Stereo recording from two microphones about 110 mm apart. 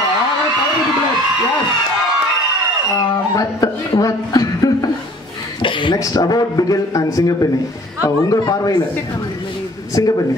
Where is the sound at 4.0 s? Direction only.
30° left (ahead or behind).